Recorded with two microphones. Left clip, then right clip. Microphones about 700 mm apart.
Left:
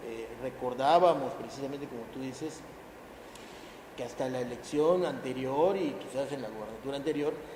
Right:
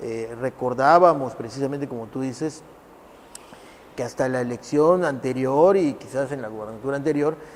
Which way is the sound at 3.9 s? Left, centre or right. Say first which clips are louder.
Right 10 dB; right.